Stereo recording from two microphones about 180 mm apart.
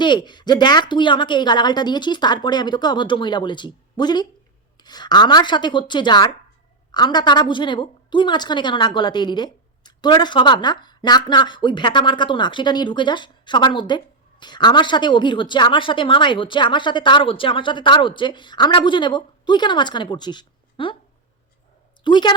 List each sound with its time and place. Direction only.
0.0 s speech: 25° left (ahead or behind)
22.0 s a woman's voice: 25° left (ahead or behind)